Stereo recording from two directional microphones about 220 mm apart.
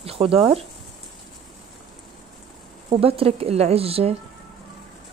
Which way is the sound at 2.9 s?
25° right (ahead or behind).